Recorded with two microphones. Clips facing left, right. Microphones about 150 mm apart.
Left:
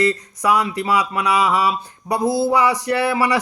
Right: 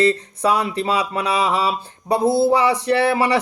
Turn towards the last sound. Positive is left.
turn(degrees=-30)  # may be behind; listen again after turning